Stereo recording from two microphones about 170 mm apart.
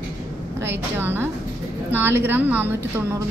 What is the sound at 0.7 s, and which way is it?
A woman's voice, 10° right (ahead or behind).